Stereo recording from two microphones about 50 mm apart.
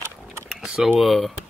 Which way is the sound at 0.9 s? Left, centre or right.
Centre.